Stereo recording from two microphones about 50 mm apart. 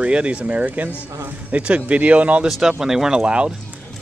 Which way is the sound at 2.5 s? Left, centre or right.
Centre.